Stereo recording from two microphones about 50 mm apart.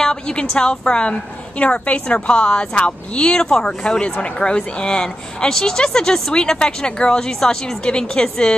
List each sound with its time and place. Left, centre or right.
0.0 s a woman's voice: centre